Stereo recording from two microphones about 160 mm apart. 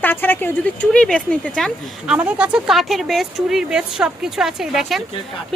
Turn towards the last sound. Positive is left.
turn(degrees=0)  # may be behind; listen again after turning